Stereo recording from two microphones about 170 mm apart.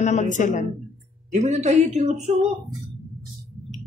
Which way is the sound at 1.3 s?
40° right (ahead or behind).